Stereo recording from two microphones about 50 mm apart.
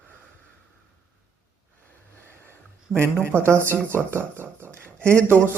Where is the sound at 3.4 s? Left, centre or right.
Right.